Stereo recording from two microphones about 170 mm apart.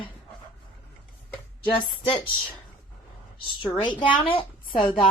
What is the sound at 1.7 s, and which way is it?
Speech, 30° left (ahead or behind).